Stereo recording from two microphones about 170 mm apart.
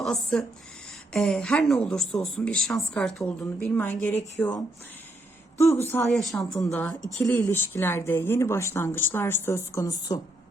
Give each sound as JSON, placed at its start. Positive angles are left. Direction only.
{"t": 0.0, "sound": "speech", "side_deg": 5}
{"t": 6.0, "sound": "speech", "side_deg": 5}